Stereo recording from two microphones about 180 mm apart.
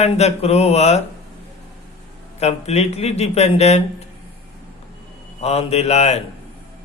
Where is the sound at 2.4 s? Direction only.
35° left (ahead or behind).